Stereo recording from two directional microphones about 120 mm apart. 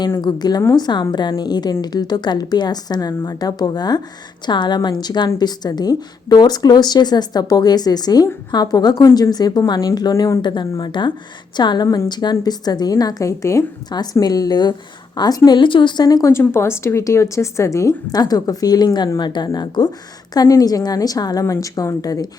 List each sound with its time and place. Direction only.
0.2 s a woman's voice: 35° left (ahead or behind)
10.4 s a woman's voice: 40° left (ahead or behind)